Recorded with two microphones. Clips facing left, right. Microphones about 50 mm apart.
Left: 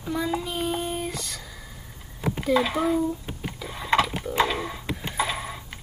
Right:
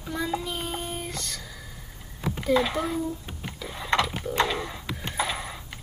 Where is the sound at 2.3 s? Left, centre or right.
Centre.